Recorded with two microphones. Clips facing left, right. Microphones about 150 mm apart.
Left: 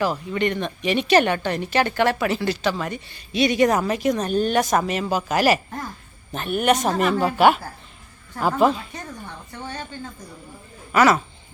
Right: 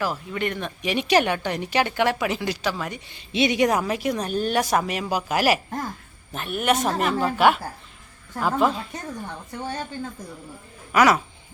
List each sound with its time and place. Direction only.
0.0 s speech: centre (ahead or behind)
3.2 s speech: 20° right (ahead or behind)
3.7 s speech: 5° right (ahead or behind)
10.9 s speech: 10° right (ahead or behind)